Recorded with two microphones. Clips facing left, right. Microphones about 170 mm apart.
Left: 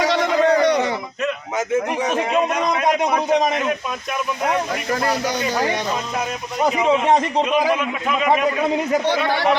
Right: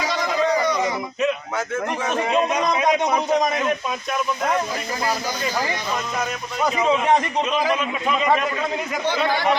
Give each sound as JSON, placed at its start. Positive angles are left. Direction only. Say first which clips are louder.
{"t": 0.0, "sound": "a sound", "louder": "left 5 dB", "side_deg": 70}
{"t": 1.5, "sound": "a man's voice", "louder": "left 4 dB", "side_deg": 15}
{"t": 5.4, "sound": "speech", "louder": "left 4 dB", "side_deg": 65}
{"t": 6.1, "sound": "a man's voice", "louder": "left 2 dB", "side_deg": 10}
{"t": 9.0, "sound": "speech", "louder": "left 2 dB", "side_deg": 65}